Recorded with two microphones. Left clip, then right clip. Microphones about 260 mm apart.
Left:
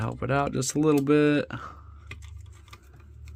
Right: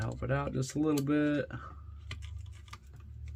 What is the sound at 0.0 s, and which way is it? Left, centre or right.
Speech, left.